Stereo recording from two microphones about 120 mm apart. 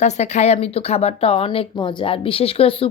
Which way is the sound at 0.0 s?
70° left (ahead or behind).